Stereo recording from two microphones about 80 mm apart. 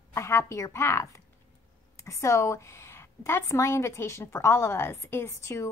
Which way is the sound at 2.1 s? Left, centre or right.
Left.